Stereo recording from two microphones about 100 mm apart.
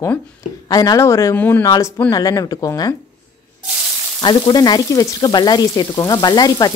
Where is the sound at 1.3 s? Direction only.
20° left (ahead or behind).